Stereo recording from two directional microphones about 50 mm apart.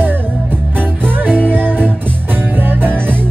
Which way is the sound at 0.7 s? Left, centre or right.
Right.